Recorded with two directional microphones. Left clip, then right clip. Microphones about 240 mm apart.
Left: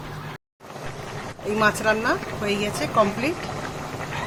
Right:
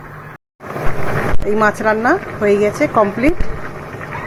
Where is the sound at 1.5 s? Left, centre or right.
Centre.